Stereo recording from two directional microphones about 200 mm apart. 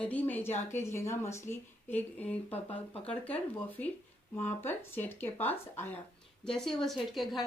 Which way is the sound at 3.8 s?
10° left (ahead or behind).